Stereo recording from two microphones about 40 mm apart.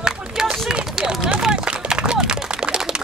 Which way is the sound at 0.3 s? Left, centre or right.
Centre.